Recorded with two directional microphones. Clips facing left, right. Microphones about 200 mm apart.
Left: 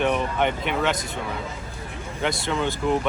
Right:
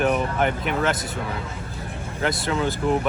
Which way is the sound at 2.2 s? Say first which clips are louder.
Right 1 dB; centre (ahead or behind).